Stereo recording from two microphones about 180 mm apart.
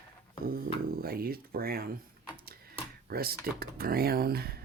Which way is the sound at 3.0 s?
60° right (ahead or behind).